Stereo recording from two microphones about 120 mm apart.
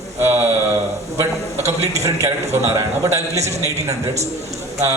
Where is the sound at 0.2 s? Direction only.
20° right (ahead or behind).